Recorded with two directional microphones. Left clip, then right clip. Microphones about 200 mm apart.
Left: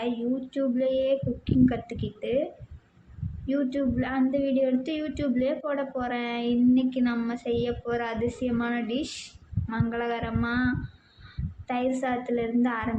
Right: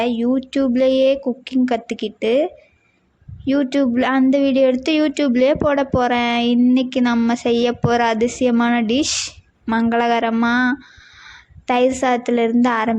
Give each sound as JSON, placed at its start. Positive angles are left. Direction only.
{"t": 0.0, "sound": "speech", "side_deg": -45}
{"t": 3.4, "sound": "speech", "side_deg": -45}